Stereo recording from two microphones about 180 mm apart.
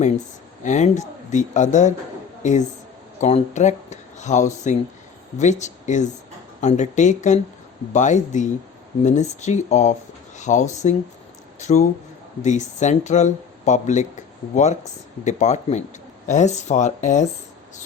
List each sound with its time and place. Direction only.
0.6 s a woman's voice: 40° left (ahead or behind)